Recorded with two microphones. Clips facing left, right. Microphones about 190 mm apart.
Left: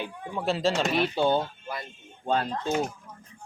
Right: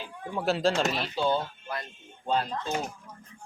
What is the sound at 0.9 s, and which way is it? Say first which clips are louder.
Speech: left 4 dB; 60° left (ahead or behind).